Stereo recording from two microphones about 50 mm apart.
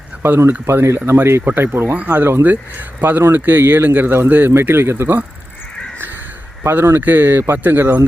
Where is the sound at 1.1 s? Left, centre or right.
Right.